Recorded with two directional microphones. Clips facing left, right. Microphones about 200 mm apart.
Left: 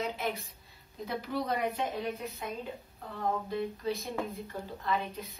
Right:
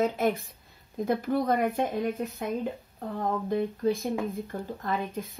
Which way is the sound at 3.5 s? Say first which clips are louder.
Right 7 dB; 50° right (ahead or behind).